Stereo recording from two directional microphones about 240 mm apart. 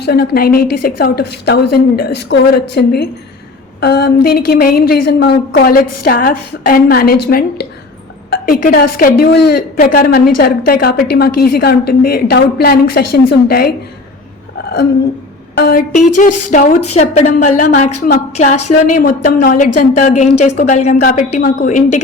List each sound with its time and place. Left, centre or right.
0.0 s a woman's voice: left
5.8 s speech: left
6.1 s a woman's voice: left
13.0 s speech: left
13.5 s a woman's voice: left
14.6 s a sound: left
15.5 s a woman's voice: left